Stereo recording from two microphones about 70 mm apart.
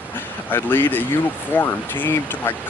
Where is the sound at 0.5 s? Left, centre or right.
Left.